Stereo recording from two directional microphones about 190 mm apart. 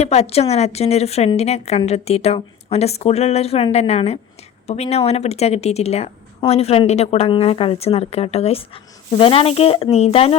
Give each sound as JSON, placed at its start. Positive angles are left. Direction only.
{"t": 0.0, "sound": "a woman's voice", "side_deg": 35}